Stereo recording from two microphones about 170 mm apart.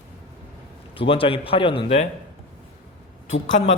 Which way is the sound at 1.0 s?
30° left (ahead or behind).